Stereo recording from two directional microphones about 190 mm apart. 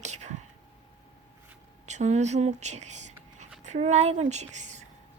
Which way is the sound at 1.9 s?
35° right (ahead or behind).